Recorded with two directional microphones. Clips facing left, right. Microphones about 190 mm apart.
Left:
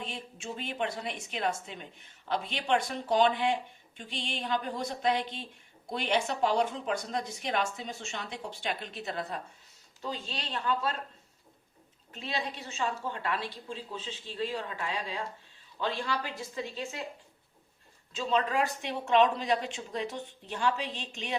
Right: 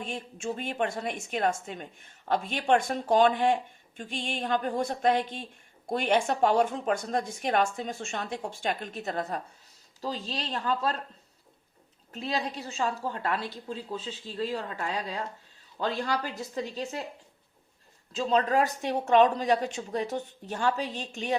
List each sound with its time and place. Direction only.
0.0 s a woman's voice: 50° right (ahead or behind)
12.1 s a woman's voice: 40° right (ahead or behind)
18.2 s a woman's voice: 40° right (ahead or behind)